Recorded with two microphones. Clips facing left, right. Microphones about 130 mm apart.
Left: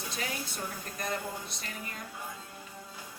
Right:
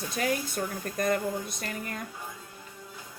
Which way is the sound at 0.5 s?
50° right (ahead or behind).